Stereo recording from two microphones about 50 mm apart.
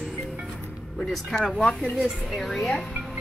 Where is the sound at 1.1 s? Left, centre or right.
Centre.